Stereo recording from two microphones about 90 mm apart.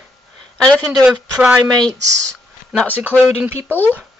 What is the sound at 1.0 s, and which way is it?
Speech, 10° right (ahead or behind).